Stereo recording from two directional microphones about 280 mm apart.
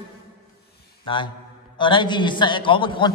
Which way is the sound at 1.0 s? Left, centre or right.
Centre.